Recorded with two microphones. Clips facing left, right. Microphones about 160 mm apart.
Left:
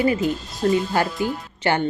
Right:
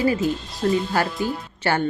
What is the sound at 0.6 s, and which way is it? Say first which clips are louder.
Speech: left 2 dB; 35° left (ahead or behind).